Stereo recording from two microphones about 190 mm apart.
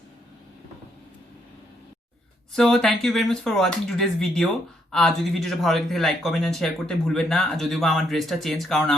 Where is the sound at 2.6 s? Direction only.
5° left (ahead or behind).